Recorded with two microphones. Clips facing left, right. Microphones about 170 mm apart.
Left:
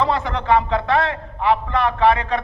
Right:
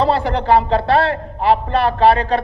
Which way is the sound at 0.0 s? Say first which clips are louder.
Right 4 dB; 35° right (ahead or behind).